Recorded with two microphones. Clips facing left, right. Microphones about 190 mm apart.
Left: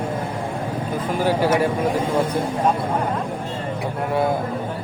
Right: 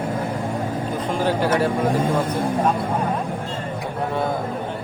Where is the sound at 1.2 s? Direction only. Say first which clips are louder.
Left 2 dB; 10° left (ahead or behind).